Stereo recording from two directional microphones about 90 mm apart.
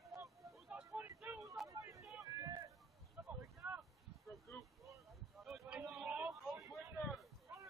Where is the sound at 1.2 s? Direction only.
5° right (ahead or behind).